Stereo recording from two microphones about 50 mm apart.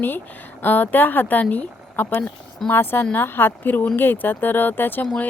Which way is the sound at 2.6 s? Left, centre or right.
Left.